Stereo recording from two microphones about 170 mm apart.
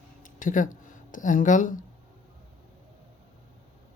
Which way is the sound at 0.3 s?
50° left (ahead or behind).